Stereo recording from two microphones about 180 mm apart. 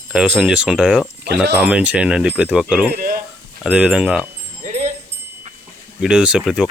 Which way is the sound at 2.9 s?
55° right (ahead or behind).